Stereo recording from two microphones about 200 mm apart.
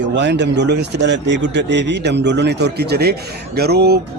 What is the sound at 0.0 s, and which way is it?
A man's voice, 60° right (ahead or behind).